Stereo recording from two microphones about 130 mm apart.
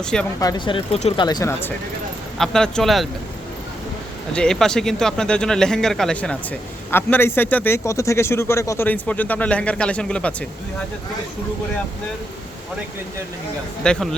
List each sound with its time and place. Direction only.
0.0 s speech: 5° left (ahead or behind)
0.7 s speech: 40° left (ahead or behind)
2.4 s speech: 5° left (ahead or behind)
4.3 s speech: 5° left (ahead or behind)
13.8 s speech: 5° left (ahead or behind)